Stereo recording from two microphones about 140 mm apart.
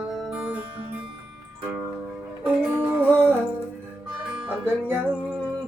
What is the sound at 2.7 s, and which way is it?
Music, 10° right (ahead or behind).